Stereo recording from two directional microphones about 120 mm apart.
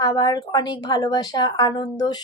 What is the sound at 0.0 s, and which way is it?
A woman's voice, 30° left (ahead or behind).